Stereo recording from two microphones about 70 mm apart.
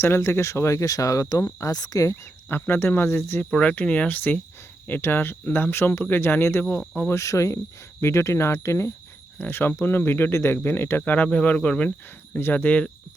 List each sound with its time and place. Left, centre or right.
0.0 s speech: left
1.7 s cricket: left
2.5 s speech: left
3.5 s speech: centre
6.7 s speech: centre
7.1 s speech: left
9.4 s speech: left
11.0 s speech: left